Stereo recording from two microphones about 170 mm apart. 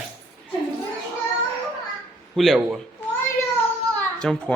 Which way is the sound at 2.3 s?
Centre (ahead or behind).